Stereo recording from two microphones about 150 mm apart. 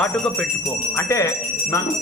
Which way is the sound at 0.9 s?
20° left (ahead or behind).